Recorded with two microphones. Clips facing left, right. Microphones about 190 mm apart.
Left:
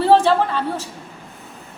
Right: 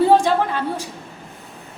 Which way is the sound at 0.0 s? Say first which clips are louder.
Left 1 dB; 15° right (ahead or behind).